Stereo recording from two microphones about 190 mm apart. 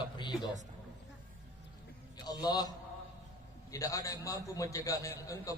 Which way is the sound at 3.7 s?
15° left (ahead or behind).